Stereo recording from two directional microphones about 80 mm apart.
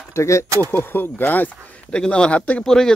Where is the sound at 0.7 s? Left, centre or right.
Left; by 2.9 s centre.